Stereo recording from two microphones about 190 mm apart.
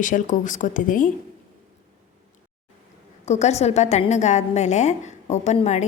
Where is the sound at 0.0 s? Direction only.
45° left (ahead or behind).